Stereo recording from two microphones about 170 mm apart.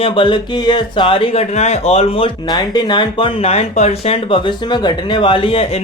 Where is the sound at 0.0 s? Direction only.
30° left (ahead or behind).